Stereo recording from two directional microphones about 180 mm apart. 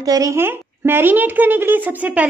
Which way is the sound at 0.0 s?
20° right (ahead or behind).